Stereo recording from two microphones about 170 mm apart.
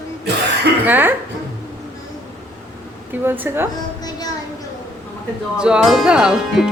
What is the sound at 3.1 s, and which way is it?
Speech, 10° right (ahead or behind).